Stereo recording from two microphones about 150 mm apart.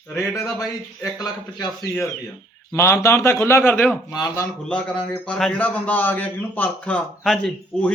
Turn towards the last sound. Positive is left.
turn(degrees=5)  # may be behind; listen again after turning